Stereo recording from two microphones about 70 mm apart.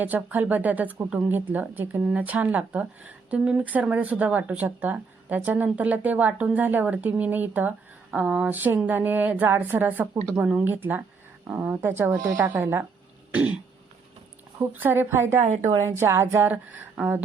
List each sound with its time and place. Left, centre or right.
0.0 s speech: right
12.1 s a woman's voice: right
12.5 s speech: right
14.6 s a woman's voice: right